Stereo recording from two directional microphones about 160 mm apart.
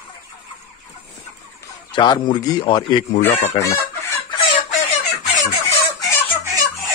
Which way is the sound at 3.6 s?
20° left (ahead or behind).